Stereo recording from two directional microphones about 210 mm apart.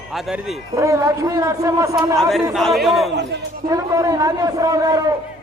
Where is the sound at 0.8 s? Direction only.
15° right (ahead or behind).